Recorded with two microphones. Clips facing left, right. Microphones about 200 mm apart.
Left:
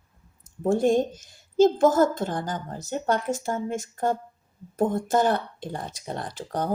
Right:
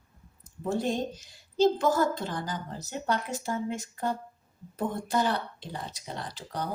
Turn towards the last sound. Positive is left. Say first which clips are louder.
# left 6 dB
turn(degrees=50)  # may be behind; listen again after turning